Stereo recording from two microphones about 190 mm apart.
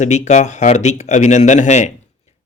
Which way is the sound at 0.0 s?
35° left (ahead or behind).